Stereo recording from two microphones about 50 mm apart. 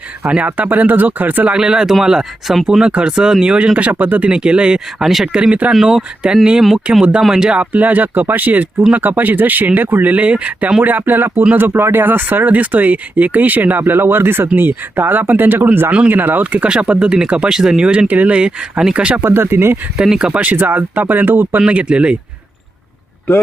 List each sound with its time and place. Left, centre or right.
0.4 s speech: right
1.5 s speech: centre
5.3 s speech: right
5.7 s speech: centre; by 7.0 s right
7.2 s speech: centre
7.6 s speech: right
10.8 s speech: right
15.9 s speech: right
16.1 s speech: right
16.7 s speech: centre
19.2 s speech: right
20.0 s speech: centre
20.4 s speech: right
21.7 s speech: right